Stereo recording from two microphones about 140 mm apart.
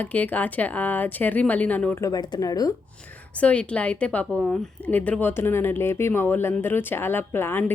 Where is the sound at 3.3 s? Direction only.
10° left (ahead or behind).